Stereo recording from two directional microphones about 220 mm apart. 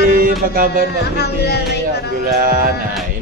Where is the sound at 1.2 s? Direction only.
50° left (ahead or behind).